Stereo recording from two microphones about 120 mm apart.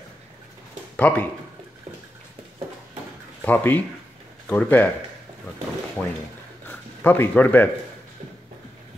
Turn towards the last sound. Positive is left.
turn(degrees=15)  # may be behind; listen again after turning